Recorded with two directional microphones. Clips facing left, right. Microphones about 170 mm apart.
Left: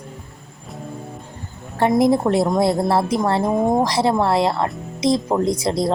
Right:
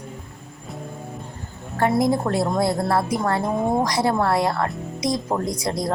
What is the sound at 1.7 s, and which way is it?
Speech, 20° left (ahead or behind).